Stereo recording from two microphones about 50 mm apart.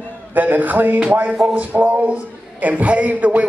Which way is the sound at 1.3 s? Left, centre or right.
Centre.